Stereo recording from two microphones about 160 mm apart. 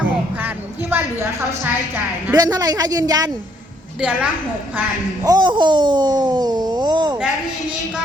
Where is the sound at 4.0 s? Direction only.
10° right (ahead or behind).